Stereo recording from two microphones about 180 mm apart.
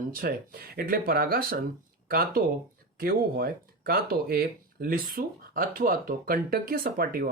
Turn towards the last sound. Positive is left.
turn(degrees=-55)  # may be behind; listen again after turning